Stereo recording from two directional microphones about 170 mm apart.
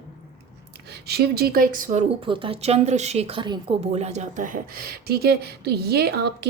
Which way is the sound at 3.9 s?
40° right (ahead or behind).